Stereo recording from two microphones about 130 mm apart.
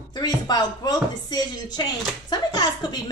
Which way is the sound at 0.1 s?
30° left (ahead or behind).